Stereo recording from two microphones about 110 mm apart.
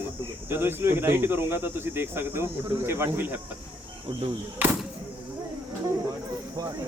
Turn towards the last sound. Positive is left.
turn(degrees=-35)  # may be behind; listen again after turning